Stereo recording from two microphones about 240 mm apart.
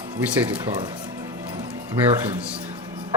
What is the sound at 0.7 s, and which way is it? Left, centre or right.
Music, centre.